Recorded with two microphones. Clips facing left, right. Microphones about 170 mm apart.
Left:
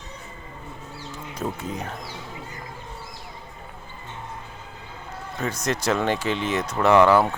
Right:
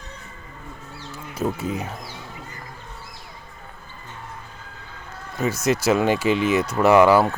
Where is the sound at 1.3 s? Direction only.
10° right (ahead or behind).